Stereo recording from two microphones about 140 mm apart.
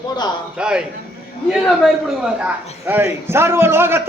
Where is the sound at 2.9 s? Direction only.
15° right (ahead or behind).